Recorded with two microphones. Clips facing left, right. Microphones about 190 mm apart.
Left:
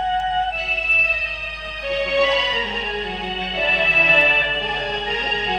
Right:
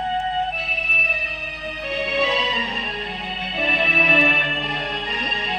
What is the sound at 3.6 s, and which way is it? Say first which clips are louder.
Music: right 1 dB; 75° left (ahead or behind).